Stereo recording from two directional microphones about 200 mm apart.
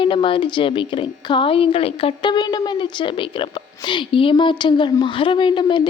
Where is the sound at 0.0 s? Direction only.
25° left (ahead or behind).